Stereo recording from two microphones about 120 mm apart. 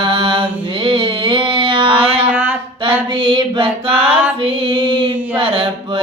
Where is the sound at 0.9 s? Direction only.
45° right (ahead or behind).